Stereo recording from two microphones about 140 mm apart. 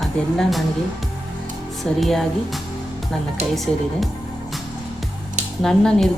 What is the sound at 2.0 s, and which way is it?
A woman's voice, centre (ahead or behind).